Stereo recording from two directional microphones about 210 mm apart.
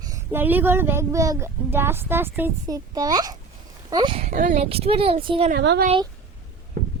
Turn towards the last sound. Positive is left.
turn(degrees=-40)  # may be behind; listen again after turning